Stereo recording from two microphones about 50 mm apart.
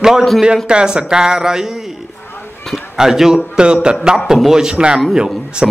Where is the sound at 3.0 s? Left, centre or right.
Centre.